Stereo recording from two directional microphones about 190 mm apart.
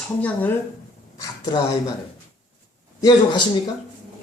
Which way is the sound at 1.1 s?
20° left (ahead or behind).